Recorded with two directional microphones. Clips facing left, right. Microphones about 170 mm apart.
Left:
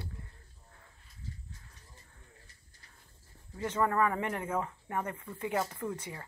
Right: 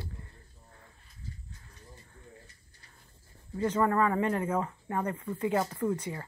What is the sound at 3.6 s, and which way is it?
Speech, 25° right (ahead or behind).